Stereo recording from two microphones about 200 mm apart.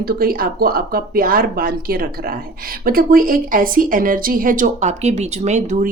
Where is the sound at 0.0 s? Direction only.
50° right (ahead or behind).